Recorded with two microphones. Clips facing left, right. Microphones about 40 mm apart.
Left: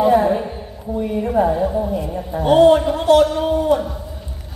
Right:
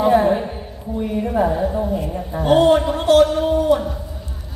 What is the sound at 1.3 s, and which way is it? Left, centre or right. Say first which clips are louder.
Speech: left 2 dB; centre.